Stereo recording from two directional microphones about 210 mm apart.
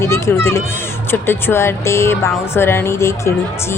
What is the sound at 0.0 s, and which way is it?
Speech, 10° left (ahead or behind).